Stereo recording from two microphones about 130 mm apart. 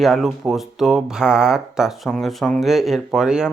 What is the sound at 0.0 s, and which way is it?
Speech, centre (ahead or behind).